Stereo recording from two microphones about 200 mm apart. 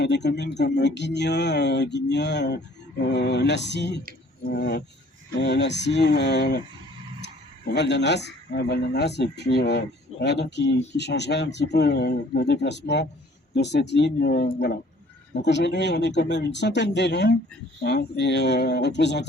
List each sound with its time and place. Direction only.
0.0 s speech: 60° left (ahead or behind)
7.7 s speech: 60° left (ahead or behind)